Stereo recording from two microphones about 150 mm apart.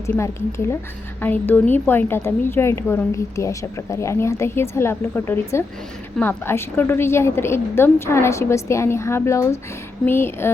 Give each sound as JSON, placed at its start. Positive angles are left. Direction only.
{"t": 0.0, "sound": "a woman's voice", "side_deg": 15}